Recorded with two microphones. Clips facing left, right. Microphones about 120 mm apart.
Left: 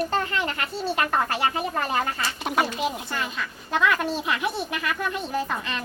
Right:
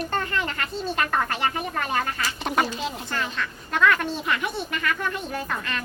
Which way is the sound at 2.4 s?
5° left (ahead or behind).